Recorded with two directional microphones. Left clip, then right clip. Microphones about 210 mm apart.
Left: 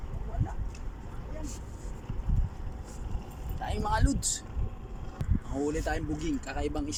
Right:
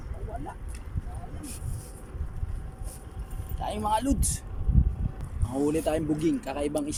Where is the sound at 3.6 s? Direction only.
15° right (ahead or behind).